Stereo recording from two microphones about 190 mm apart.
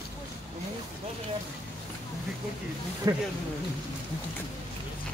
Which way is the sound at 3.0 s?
15° right (ahead or behind).